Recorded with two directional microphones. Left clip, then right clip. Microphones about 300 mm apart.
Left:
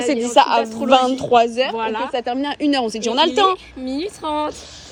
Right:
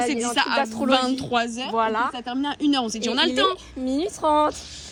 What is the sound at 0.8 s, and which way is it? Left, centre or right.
Speech, centre.